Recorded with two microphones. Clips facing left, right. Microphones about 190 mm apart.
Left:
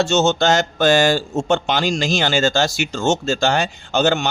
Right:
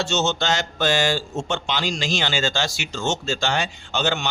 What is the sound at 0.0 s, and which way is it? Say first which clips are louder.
Speech: left 7 dB; 50° left (ahead or behind).